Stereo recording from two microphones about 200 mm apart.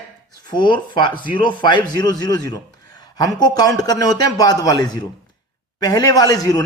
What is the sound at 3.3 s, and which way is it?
Speech, 20° left (ahead or behind).